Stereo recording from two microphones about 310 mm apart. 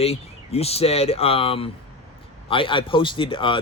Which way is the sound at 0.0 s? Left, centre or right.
Centre.